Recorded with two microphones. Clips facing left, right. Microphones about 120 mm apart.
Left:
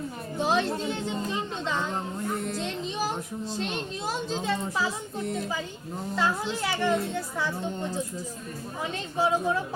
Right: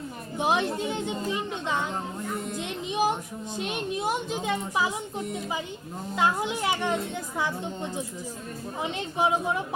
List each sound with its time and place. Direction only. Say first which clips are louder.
0.3 s a child's voice: even; 15° right (ahead or behind)